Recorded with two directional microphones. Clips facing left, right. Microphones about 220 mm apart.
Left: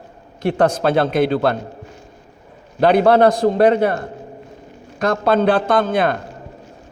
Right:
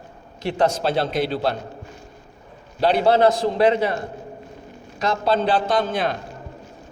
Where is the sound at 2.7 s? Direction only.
55° left (ahead or behind).